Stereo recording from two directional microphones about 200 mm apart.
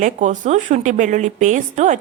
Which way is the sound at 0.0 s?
40° right (ahead or behind).